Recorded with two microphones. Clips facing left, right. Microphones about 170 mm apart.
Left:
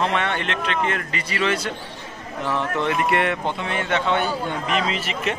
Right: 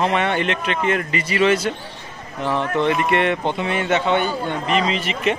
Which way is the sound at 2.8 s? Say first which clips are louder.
Right 2 dB; centre (ahead or behind).